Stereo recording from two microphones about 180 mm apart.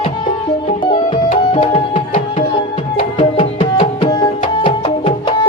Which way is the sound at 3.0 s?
30° left (ahead or behind).